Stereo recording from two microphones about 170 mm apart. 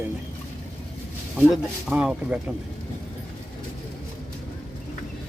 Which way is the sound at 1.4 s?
5° right (ahead or behind).